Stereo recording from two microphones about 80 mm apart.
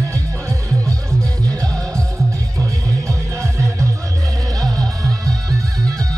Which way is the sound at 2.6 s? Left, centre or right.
Right.